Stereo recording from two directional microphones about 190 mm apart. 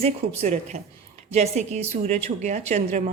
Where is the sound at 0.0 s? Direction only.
40° right (ahead or behind).